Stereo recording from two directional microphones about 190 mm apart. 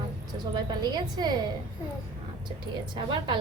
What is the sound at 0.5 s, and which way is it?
Speech, 20° right (ahead or behind).